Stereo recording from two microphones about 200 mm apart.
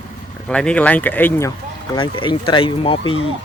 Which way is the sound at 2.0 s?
25° left (ahead or behind).